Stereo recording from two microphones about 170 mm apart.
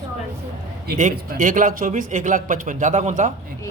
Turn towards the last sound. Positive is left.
turn(degrees=-50)  # may be behind; listen again after turning